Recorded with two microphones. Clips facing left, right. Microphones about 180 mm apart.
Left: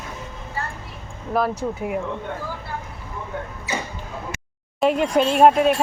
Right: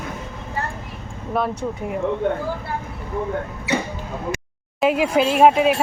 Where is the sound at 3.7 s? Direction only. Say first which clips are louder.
Right 6 dB; 65° right (ahead or behind).